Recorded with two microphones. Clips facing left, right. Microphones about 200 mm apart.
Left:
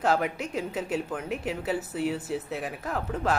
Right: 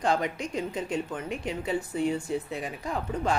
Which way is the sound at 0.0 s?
5° left (ahead or behind).